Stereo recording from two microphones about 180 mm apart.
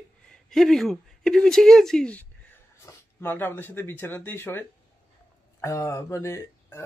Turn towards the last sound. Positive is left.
turn(degrees=15)  # may be behind; listen again after turning